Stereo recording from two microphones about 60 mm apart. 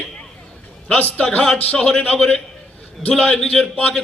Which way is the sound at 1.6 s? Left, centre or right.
Centre.